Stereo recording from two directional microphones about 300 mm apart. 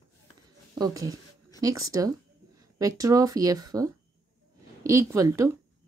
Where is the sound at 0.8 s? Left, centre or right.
Centre.